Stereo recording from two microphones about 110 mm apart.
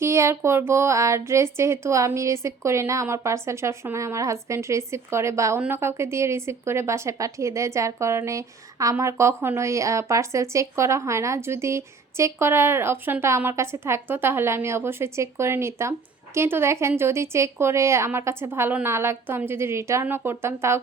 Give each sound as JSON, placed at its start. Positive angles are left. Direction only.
{"t": 0.0, "sound": "a woman's voice", "side_deg": -25}